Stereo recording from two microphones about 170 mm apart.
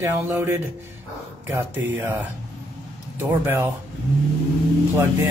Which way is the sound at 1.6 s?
10° right (ahead or behind).